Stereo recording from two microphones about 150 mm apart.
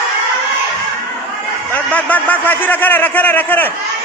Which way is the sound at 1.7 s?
10° left (ahead or behind).